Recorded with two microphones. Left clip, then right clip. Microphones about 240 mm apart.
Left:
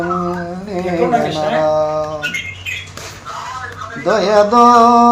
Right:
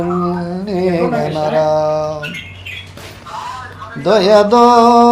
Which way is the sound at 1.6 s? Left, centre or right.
Right.